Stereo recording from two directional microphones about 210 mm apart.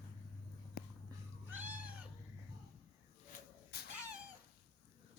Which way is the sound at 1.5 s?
5° right (ahead or behind).